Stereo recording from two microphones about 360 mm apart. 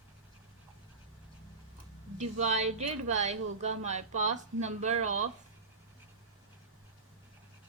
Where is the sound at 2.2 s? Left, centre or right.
Centre.